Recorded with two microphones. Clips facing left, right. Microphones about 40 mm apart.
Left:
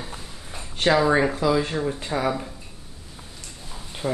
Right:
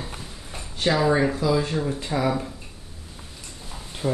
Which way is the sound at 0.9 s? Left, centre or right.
Centre.